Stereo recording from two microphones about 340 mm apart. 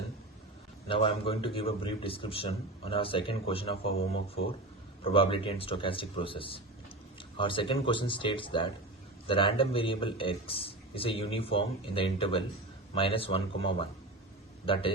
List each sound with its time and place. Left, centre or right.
0.9 s a man's voice: centre
5.0 s a man's voice: centre